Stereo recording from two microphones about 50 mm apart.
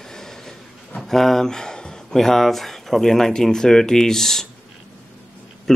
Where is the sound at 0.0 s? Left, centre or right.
Centre.